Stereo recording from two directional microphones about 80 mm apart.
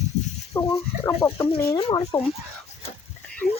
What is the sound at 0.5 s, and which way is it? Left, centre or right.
Speech, left.